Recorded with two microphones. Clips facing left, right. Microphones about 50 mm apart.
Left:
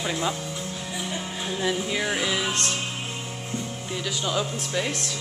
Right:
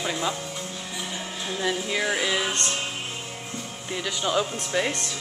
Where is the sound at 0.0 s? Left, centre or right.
Centre.